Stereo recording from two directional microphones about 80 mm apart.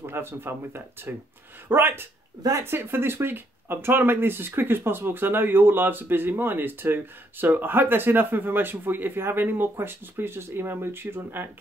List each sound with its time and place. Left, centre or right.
0.0 s speech: right